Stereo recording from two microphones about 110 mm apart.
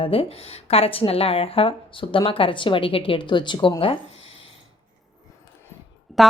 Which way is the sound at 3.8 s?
60° left (ahead or behind).